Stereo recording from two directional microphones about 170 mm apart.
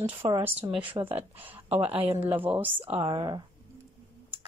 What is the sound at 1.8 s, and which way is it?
Speech, 35° right (ahead or behind).